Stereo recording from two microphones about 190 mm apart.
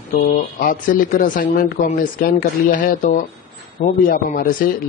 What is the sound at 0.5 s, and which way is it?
A man's voice, 45° left (ahead or behind).